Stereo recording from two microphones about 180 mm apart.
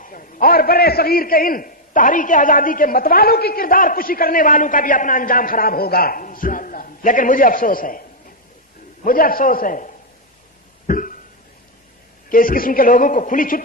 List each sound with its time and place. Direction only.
0.0 s a man's voice: 50° left (ahead or behind)
9.0 s a man's voice: 55° left (ahead or behind)
10.8 s cough: 50° left (ahead or behind)
12.3 s a man's voice: 50° left (ahead or behind)